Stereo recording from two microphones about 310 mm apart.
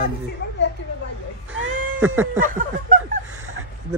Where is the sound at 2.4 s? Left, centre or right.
Right.